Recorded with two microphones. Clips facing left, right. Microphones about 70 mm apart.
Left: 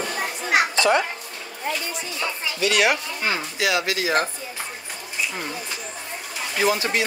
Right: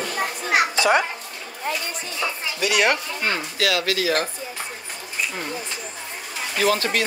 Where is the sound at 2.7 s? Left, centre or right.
Centre.